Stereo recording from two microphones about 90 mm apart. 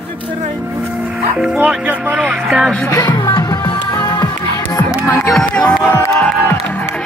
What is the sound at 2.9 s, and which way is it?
Music, 40° left (ahead or behind).